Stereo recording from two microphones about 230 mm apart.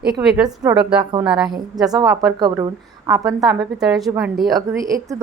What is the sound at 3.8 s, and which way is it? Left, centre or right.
Speech, centre.